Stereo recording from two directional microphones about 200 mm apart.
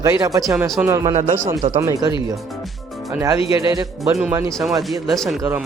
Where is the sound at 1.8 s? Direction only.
20° right (ahead or behind).